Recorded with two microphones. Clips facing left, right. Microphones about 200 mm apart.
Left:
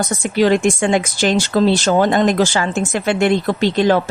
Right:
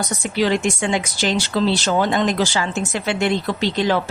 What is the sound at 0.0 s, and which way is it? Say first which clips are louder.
Speech: left 5 dB; 50° left (ahead or behind).